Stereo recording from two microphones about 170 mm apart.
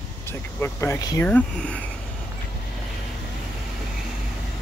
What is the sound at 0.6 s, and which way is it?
Speech, 15° left (ahead or behind).